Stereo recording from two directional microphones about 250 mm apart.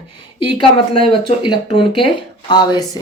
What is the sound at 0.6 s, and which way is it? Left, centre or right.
Speech, centre.